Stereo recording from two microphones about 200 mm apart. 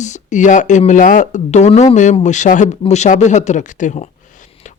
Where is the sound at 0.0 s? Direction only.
35° left (ahead or behind).